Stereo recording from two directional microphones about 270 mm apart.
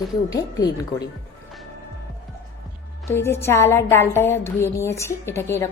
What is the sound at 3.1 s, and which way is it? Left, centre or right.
A woman's voice, centre.